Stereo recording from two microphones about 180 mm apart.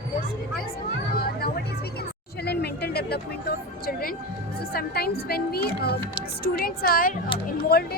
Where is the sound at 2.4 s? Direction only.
65° left (ahead or behind).